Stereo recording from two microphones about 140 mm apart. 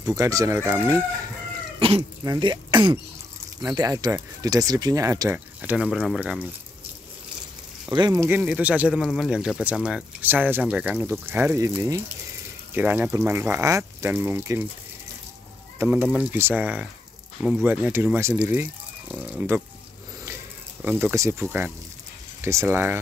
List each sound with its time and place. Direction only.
0.0 s speech: 25° right (ahead or behind)
1.8 s speech: 40° right (ahead or behind)
3.6 s speech: 25° right (ahead or behind)
5.6 s speech: 10° right (ahead or behind)
7.9 s speech: 25° right (ahead or behind)
8.4 s speech: 10° right (ahead or behind)
15.8 s speech: 15° right (ahead or behind)
20.8 s speech: 15° right (ahead or behind)